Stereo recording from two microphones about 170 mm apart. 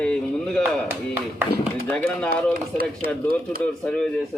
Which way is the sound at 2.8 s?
60° right (ahead or behind).